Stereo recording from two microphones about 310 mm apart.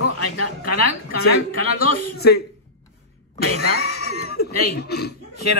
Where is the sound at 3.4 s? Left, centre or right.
Left.